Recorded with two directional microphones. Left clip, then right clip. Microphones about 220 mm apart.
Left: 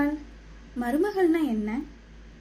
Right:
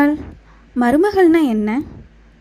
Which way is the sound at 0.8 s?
40° right (ahead or behind).